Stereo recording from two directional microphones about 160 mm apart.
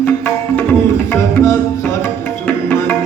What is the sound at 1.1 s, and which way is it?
Tabla, 15° left (ahead or behind).